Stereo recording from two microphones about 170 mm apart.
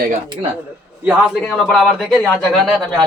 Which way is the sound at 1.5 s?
5° left (ahead or behind).